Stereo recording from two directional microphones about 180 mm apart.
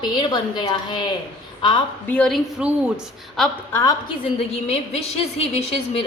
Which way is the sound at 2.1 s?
5° left (ahead or behind).